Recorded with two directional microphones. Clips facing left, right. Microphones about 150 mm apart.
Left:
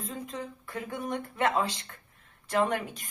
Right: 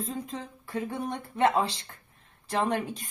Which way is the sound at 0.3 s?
25° right (ahead or behind).